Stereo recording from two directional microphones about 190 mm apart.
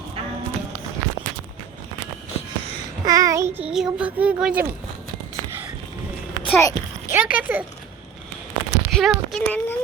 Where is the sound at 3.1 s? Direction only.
20° right (ahead or behind).